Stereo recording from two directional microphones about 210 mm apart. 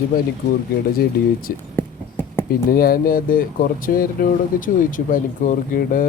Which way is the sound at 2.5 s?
45° left (ahead or behind).